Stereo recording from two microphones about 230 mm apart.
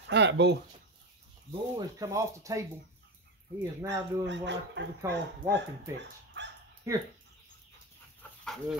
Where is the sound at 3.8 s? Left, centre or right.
Right.